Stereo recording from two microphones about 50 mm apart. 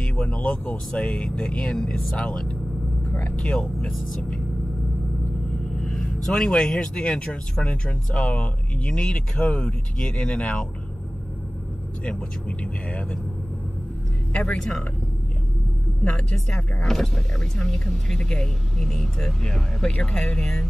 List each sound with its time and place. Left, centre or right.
0.0 s speech: left
5.8 s speech: centre
12.0 s speech: left
14.3 s speech: left
14.6 s speech: centre
16.0 s speech: left
16.8 s speech: centre